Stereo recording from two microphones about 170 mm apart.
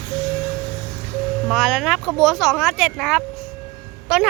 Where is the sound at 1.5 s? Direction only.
Centre (ahead or behind).